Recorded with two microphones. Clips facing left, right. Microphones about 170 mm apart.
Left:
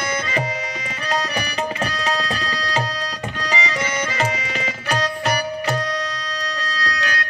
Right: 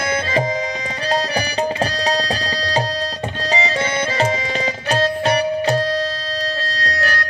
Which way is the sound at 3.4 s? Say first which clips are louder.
Right 4 dB; 30° right (ahead or behind).